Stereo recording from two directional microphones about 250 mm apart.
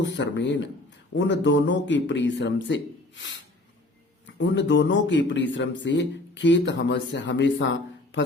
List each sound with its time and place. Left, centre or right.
0.0 s speech: left
4.3 s speech: left